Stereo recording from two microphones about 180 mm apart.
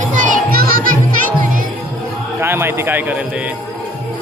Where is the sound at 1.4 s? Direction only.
50° right (ahead or behind).